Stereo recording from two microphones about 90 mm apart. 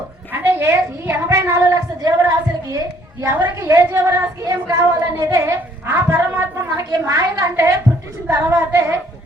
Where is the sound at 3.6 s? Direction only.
30° right (ahead or behind).